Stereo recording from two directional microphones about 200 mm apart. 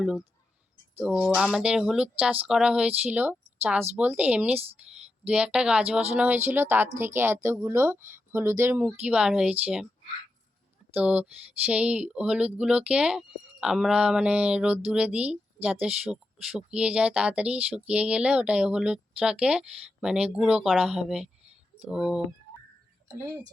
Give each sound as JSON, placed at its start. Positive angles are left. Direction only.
{"t": 0.9, "sound": "speech", "side_deg": -5}
{"t": 10.9, "sound": "speech", "side_deg": -5}
{"t": 23.0, "sound": "speech", "side_deg": -15}